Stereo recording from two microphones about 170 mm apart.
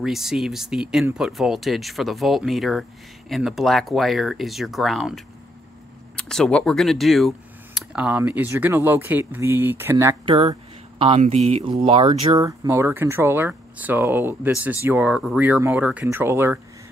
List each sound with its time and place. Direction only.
0.0 s speech: centre (ahead or behind)
10.2 s speech: 30° right (ahead or behind); by 16.5 s 15° right (ahead or behind)